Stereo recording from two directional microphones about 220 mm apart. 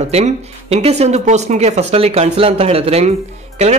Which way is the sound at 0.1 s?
30° right (ahead or behind).